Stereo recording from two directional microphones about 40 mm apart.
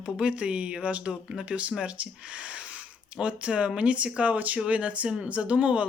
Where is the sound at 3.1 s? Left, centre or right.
Right.